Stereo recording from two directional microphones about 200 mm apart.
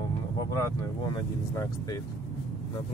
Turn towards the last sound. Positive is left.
turn(degrees=15)  # may be behind; listen again after turning